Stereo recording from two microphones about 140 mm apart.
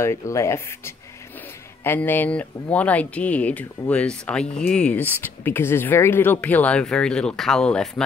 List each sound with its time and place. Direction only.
0.0 s speech: 20° left (ahead or behind); by 8.0 s 5° left (ahead or behind)